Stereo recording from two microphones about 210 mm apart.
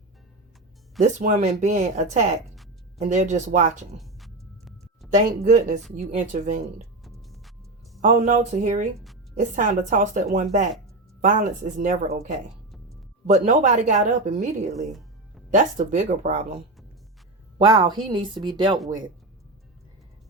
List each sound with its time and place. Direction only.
0.9 s speech: 35° right (ahead or behind)
3.9 s a sound: centre (ahead or behind)
5.1 s speech: 35° right (ahead or behind)
7.0 s music: centre (ahead or behind)
8.0 s speech: 35° right (ahead or behind)
13.2 s speech: 35° right (ahead or behind)
14.7 s music: centre (ahead or behind)
15.5 s a woman's voice: 35° right (ahead or behind)